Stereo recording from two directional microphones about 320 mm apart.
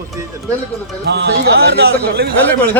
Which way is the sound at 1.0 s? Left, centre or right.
Right.